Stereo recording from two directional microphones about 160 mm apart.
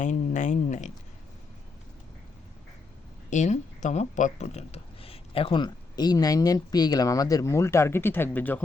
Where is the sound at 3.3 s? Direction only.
50° left (ahead or behind).